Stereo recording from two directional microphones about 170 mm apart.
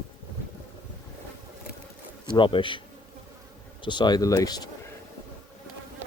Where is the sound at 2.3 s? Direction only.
30° left (ahead or behind).